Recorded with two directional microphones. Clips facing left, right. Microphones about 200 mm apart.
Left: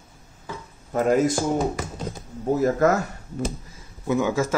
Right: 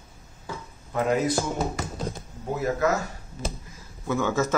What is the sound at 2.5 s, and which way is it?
Speech, 45° left (ahead or behind).